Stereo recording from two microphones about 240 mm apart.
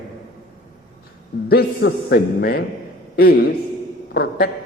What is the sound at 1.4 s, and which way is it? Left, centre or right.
A man's voice, left.